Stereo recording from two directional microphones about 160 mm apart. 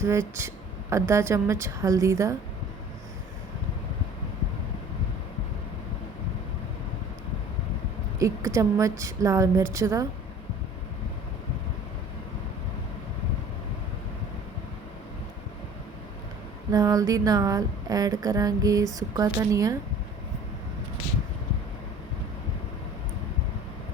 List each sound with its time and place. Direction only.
0.0 s a woman's voice: 15° right (ahead or behind)
8.2 s speech: 20° right (ahead or behind)
16.7 s speech: 20° right (ahead or behind)